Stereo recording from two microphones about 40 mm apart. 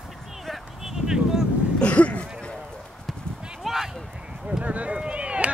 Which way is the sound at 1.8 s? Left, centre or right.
Left.